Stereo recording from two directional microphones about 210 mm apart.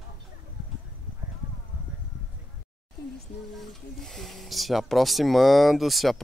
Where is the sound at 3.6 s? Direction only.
Centre (ahead or behind).